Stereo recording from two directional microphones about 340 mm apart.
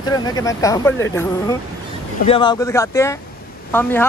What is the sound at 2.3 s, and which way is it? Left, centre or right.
Speech, centre.